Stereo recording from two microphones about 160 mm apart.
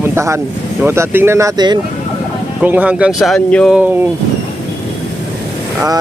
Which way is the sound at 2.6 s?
10° right (ahead or behind).